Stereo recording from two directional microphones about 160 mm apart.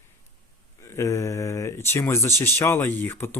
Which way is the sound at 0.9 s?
20° left (ahead or behind).